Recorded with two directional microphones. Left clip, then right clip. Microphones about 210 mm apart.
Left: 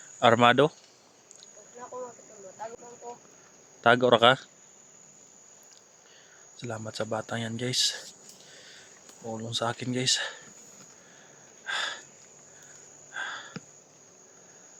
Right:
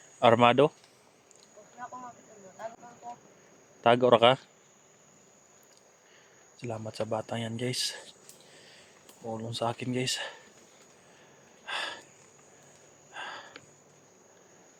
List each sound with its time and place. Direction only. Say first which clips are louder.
0.2 s speech: left 1 dB; 5° left (ahead or behind)
3.8 s speech: left 1 dB; 5° left (ahead or behind)
6.6 s speech: left 1 dB; 5° left (ahead or behind)
9.2 s speech: left 2 dB; 5° left (ahead or behind)
11.6 s a sound: left 3 dB; centre (ahead or behind)
13.1 s a sound: left 5 dB; centre (ahead or behind)